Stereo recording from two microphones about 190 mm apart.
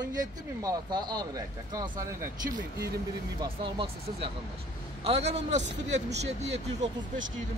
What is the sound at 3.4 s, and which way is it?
A man's voice, 25° right (ahead or behind).